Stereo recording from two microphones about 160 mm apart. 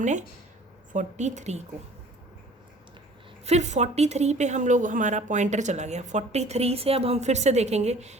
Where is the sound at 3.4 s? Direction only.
45° right (ahead or behind).